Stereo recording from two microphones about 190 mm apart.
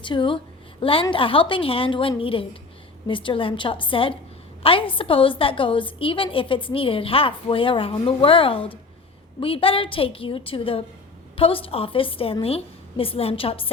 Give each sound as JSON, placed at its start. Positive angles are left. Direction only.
{"t": 0.0, "sound": "a woman's voice", "side_deg": 25}